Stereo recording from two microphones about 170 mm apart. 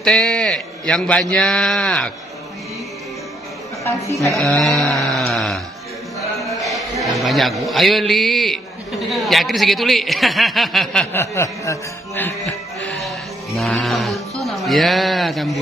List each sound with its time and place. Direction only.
0.0 s a man's voice: 5° left (ahead or behind)
4.4 s a man's voice: 5° left (ahead or behind)
5.1 s a sound: centre (ahead or behind)
7.0 s a man's voice: centre (ahead or behind)
11.1 s music: 15° left (ahead or behind)
13.6 s a man's voice: centre (ahead or behind)